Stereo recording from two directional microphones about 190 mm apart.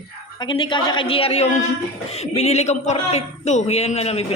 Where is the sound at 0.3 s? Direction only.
25° left (ahead or behind).